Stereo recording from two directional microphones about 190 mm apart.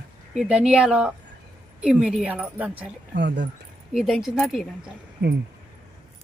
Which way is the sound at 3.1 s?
65° right (ahead or behind).